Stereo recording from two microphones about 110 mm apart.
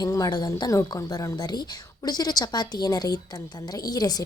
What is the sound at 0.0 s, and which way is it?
A woman's voice, 35° left (ahead or behind).